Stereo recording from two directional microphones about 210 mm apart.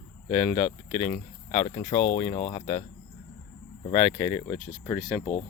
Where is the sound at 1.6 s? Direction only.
25° left (ahead or behind).